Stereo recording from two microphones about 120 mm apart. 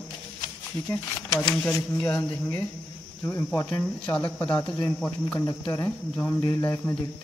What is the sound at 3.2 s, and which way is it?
Speech, 20° left (ahead or behind).